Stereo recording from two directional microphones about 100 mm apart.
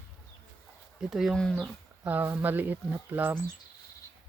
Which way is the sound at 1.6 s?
20° right (ahead or behind).